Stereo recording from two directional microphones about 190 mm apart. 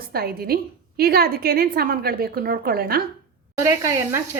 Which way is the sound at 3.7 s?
15° right (ahead or behind).